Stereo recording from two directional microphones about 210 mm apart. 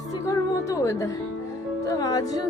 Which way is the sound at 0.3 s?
15° left (ahead or behind).